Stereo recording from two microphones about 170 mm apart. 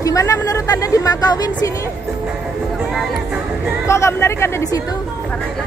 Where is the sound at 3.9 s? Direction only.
15° left (ahead or behind).